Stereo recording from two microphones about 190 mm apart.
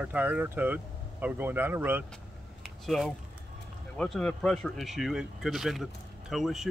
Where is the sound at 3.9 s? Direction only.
Centre (ahead or behind).